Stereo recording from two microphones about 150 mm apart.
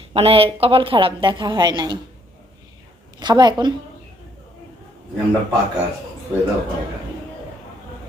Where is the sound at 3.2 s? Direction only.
30° right (ahead or behind).